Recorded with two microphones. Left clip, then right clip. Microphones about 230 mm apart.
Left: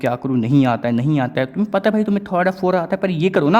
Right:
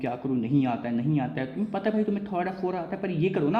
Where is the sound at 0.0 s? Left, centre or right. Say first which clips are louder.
Left 10 dB; left.